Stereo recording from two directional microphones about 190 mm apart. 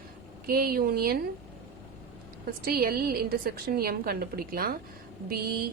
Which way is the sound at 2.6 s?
50° right (ahead or behind).